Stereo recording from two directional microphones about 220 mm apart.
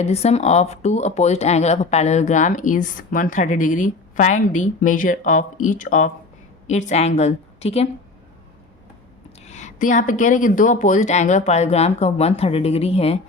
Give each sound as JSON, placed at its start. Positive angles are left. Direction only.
{"t": 0.0, "sound": "a woman's voice", "side_deg": 30}
{"t": 9.5, "sound": "speech", "side_deg": 35}